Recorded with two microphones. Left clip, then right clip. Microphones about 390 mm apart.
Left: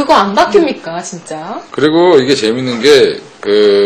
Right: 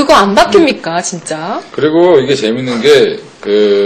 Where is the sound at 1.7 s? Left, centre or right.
Left.